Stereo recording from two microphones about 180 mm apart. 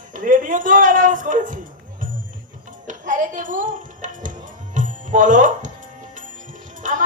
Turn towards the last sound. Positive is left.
turn(degrees=-45)  # may be behind; listen again after turning